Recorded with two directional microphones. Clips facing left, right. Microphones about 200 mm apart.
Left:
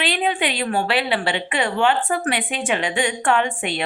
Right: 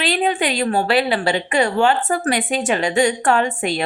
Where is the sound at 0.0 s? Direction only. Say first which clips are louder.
Right 3 dB; 40° right (ahead or behind).